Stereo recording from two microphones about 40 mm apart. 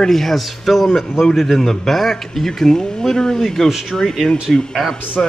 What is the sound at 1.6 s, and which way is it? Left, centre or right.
Speech, centre.